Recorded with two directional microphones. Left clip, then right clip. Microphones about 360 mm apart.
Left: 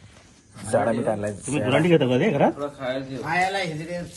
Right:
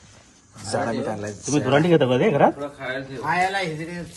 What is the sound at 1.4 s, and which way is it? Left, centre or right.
Speech, right.